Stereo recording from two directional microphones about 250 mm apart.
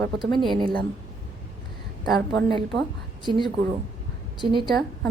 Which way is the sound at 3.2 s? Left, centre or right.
Centre.